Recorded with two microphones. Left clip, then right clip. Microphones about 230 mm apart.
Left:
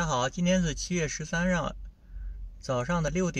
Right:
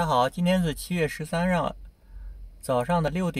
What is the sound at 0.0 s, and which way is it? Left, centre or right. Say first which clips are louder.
Speech: right 5 dB; right.